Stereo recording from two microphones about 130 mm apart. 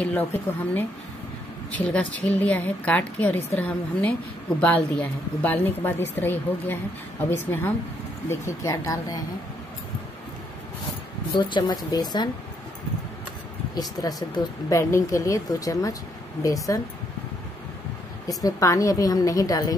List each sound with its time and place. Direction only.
0.0 s a woman's voice: 10° left (ahead or behind)
1.7 s a woman's voice: 10° left (ahead or behind)
11.3 s speech: 35° left (ahead or behind)
13.7 s speech: 30° left (ahead or behind)
18.4 s speech: 25° left (ahead or behind)